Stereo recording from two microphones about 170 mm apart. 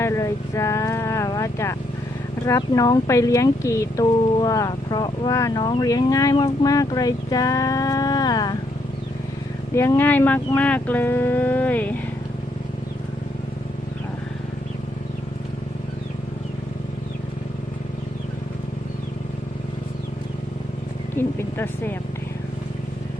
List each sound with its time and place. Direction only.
0.0 s cattle: 15° left (ahead or behind)
2.5 s speech: 20° left (ahead or behind)
9.7 s speech: 15° left (ahead or behind)
21.2 s a sound: 15° left (ahead or behind)